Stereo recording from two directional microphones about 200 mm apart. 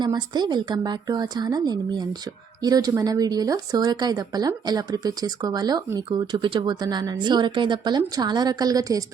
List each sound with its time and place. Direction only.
0.0 s speech: 20° right (ahead or behind)